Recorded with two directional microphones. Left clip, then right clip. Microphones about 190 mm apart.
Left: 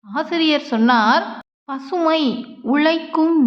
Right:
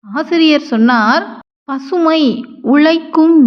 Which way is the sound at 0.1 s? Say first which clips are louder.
Right 7 dB; 20° right (ahead or behind).